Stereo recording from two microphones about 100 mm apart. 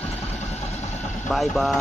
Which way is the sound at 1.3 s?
Centre (ahead or behind).